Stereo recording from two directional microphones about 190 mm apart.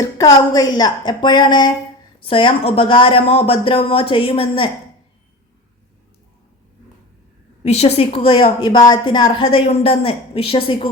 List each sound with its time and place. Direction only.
0.2 s a woman's voice: 20° left (ahead or behind)
7.6 s a woman's voice: 35° left (ahead or behind)